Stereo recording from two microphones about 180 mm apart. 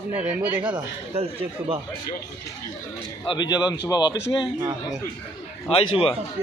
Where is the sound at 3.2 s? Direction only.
25° left (ahead or behind).